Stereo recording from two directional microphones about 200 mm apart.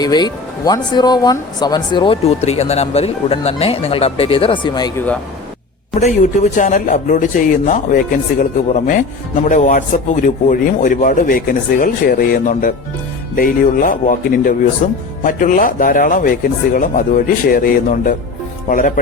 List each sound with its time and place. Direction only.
0.0 s speech: 20° left (ahead or behind)
6.6 s a man's voice: 40° left (ahead or behind)